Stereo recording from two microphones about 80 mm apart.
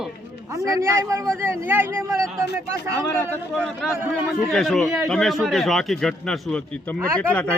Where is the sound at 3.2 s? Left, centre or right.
Centre.